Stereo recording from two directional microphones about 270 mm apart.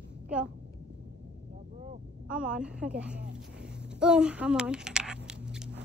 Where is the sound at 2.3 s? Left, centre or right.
Centre.